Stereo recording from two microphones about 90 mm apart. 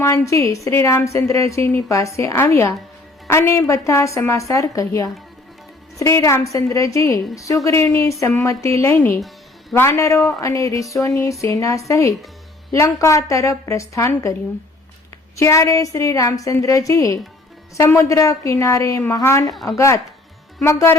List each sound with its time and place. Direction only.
0.0 s a woman's voice: 35° left (ahead or behind)
15.4 s a woman's voice: 35° left (ahead or behind)